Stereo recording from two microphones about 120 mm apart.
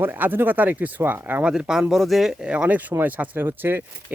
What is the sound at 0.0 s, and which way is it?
Speech, 15° right (ahead or behind).